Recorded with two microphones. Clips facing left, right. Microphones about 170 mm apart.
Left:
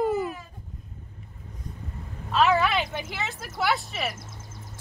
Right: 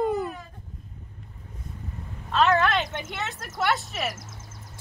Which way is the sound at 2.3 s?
5° left (ahead or behind).